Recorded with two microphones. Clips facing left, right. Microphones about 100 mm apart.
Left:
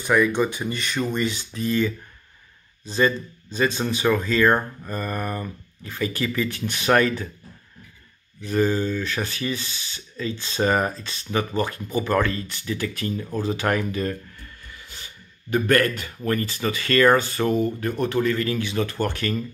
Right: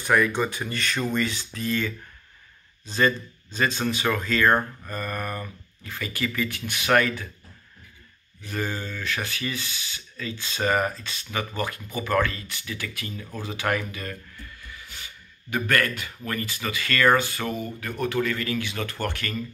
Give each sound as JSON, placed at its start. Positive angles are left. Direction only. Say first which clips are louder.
{"t": 0.1, "sound": "speech", "louder": "left 3 dB", "side_deg": 5}
{"t": 3.5, "sound": "speech", "louder": "left 2 dB", "side_deg": 20}
{"t": 8.5, "sound": "speech", "louder": "left 9 dB", "side_deg": 25}
{"t": 15.5, "sound": "speech", "louder": "left 5 dB", "side_deg": 30}